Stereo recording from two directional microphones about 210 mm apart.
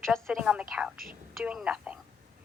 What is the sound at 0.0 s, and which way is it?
A woman's voice, centre (ahead or behind).